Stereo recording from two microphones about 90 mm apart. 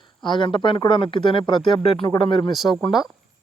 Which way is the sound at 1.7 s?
80° left.